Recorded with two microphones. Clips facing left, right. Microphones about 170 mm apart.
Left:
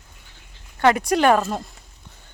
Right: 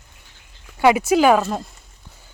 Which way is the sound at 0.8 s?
5° right (ahead or behind).